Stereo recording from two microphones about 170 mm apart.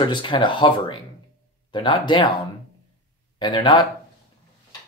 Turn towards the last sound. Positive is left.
turn(degrees=25)  # may be behind; listen again after turning